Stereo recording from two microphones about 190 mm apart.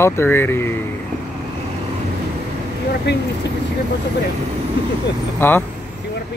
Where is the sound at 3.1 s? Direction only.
65° left (ahead or behind).